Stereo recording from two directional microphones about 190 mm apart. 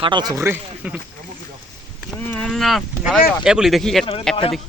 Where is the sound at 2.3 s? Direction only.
5° left (ahead or behind).